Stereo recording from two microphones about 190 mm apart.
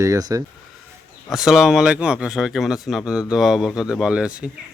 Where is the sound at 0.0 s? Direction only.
15° right (ahead or behind).